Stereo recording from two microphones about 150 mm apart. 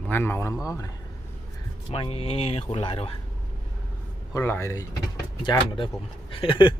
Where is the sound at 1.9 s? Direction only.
40° left (ahead or behind).